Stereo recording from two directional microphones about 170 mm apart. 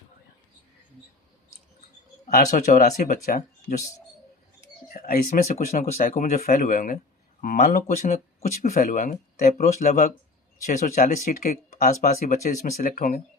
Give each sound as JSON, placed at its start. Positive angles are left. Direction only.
{"t": 2.2, "sound": "speech", "side_deg": 45}
{"t": 4.9, "sound": "speech", "side_deg": 60}
{"t": 8.1, "sound": "speech", "side_deg": 40}
{"t": 8.7, "sound": "speech", "side_deg": 55}